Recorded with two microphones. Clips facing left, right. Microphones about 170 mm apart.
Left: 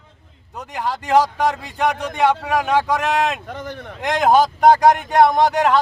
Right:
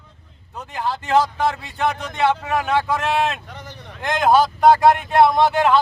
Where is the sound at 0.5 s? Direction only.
15° left (ahead or behind).